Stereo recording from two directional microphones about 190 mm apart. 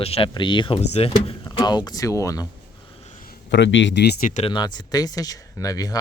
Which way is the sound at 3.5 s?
75° left (ahead or behind).